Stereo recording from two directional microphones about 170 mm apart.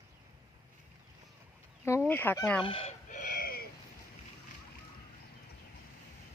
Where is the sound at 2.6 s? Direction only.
30° left (ahead or behind).